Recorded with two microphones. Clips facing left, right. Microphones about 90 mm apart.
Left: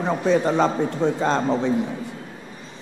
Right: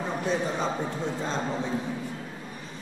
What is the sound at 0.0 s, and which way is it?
A man's voice, 80° left.